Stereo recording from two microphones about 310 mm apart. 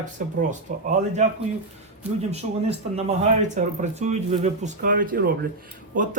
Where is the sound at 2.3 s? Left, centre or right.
Centre.